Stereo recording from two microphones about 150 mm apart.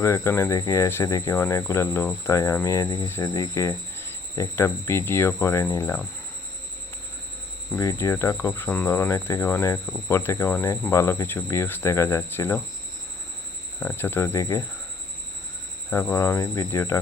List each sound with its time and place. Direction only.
0.0 s speech: 15° left (ahead or behind)
7.8 s speech: 20° left (ahead or behind)
13.7 s speech: 15° left (ahead or behind)
15.9 s speech: 15° left (ahead or behind)